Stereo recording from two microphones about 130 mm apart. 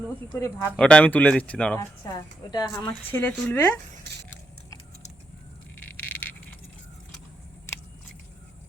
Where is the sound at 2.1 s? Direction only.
30° left (ahead or behind).